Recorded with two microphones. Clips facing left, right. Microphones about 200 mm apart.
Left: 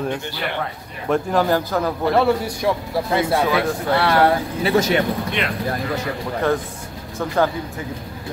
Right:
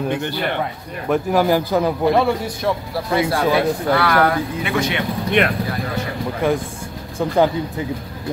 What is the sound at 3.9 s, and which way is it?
Speech, 30° left (ahead or behind).